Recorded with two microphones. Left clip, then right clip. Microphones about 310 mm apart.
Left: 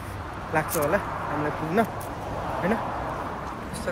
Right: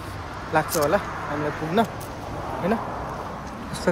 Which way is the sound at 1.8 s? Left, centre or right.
Centre.